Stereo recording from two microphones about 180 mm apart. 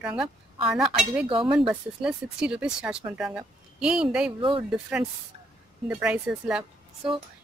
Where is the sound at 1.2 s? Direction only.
30° right (ahead or behind).